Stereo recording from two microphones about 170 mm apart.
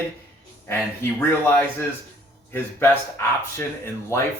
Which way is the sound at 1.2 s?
15° left (ahead or behind).